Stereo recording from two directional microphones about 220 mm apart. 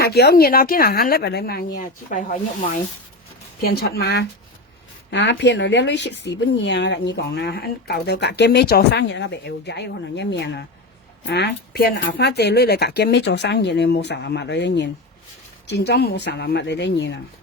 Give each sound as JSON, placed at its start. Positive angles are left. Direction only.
{"t": 0.0, "sound": "speech", "side_deg": 45}